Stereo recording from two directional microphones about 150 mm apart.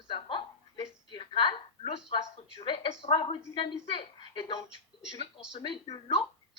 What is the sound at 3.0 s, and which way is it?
Speech, 40° left (ahead or behind).